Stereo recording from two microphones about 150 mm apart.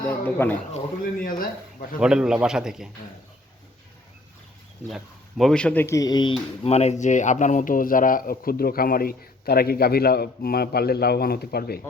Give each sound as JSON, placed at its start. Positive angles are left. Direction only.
{"t": 0.1, "sound": "speech", "side_deg": 10}
{"t": 1.2, "sound": "speech", "side_deg": 70}
{"t": 2.0, "sound": "a man's voice", "side_deg": -5}
{"t": 4.9, "sound": "speech", "side_deg": 0}
{"t": 6.7, "sound": "speech", "side_deg": 45}